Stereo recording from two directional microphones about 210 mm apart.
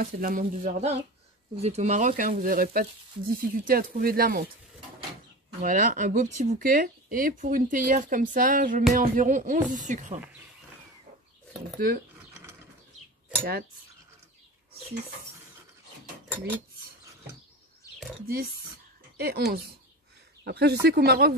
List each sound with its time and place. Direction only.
0.0 s speech: 40° right (ahead or behind)
5.6 s speech: 40° right (ahead or behind)
18.2 s speech: 45° right (ahead or behind)